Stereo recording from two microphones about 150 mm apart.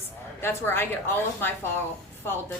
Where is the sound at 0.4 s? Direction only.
15° left (ahead or behind).